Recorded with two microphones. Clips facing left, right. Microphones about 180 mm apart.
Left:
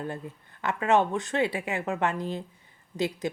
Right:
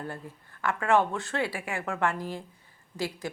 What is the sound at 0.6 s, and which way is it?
A woman's voice, 20° left (ahead or behind).